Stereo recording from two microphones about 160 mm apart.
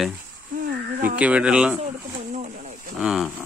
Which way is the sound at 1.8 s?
45° right (ahead or behind).